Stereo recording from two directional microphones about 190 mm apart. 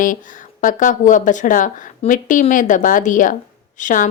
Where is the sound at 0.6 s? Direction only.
45° left (ahead or behind).